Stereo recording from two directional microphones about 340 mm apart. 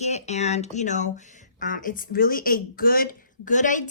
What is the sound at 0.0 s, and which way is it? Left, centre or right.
A woman's voice, centre.